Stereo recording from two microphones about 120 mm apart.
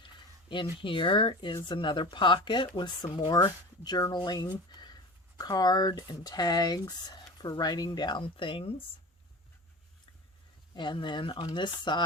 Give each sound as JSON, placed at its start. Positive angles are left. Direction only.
{"t": 0.0, "sound": "speech", "side_deg": 40}
{"t": 10.8, "sound": "speech", "side_deg": 40}